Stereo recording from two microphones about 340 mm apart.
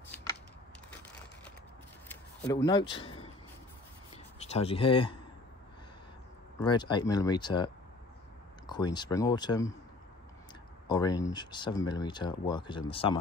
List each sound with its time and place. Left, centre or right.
2.0 s a sound: centre
4.4 s speech: centre
6.6 s speech: centre
10.9 s speech: centre